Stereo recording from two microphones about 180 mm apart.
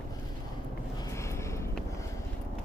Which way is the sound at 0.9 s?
15° left (ahead or behind).